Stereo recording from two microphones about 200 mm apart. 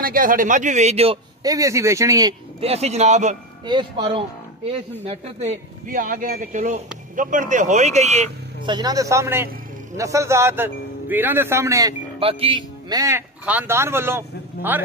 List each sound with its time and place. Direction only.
0.0 s a man's voice: 45° right (ahead or behind); by 2.3 s 15° right (ahead or behind)
2.6 s speech: 30° right (ahead or behind)
3.6 s a man's voice: 25° right (ahead or behind)
8.6 s a man's voice: 20° right (ahead or behind)
12.2 s a man's voice: 30° right (ahead or behind); by 14.8 s 10° right (ahead or behind)